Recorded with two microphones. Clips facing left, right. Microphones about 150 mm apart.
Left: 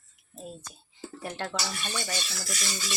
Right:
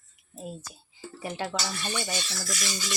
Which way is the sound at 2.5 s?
30° left (ahead or behind).